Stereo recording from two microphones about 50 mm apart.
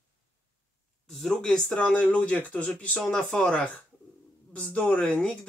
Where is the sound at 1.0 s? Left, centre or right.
Centre; by 3.0 s left.